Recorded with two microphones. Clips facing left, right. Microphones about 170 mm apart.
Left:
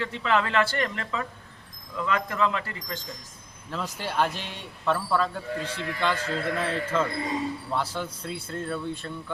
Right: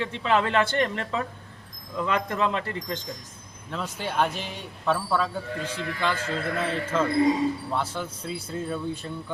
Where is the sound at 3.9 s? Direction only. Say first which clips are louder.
Right 1 dB; centre (ahead or behind).